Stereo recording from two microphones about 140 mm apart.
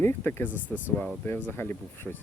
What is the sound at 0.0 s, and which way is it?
Speech, 15° left (ahead or behind).